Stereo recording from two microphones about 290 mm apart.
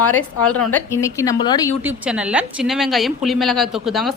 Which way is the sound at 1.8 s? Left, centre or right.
Centre.